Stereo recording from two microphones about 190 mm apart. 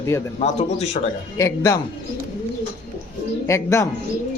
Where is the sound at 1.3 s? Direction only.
15° left (ahead or behind).